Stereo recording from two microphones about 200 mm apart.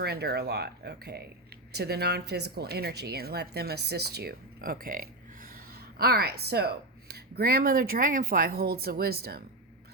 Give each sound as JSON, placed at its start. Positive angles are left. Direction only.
{"t": 0.0, "sound": "speech", "side_deg": -50}